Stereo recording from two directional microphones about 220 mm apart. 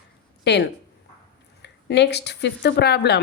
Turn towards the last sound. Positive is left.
turn(degrees=50)  # may be behind; listen again after turning